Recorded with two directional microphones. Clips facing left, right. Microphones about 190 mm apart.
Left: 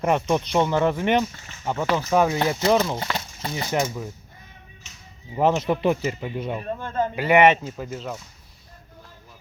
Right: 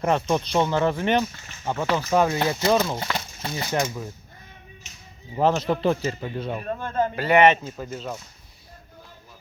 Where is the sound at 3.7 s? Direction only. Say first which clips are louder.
Left 1 dB; 15° left (ahead or behind).